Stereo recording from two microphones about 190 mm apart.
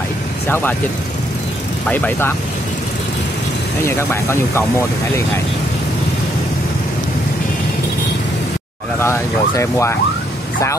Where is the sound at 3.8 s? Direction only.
15° left (ahead or behind).